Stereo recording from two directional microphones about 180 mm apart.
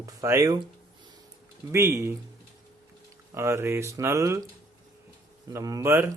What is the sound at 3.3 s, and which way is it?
Speech, 15° right (ahead or behind).